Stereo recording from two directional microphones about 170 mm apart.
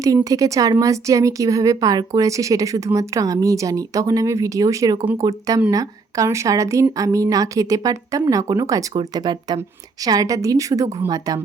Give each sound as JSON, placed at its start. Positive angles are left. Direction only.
{"t": 0.3, "sound": "a woman's voice", "side_deg": -20}